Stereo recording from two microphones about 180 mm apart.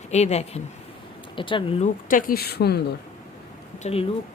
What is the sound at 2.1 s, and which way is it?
Speech, 50° left (ahead or behind).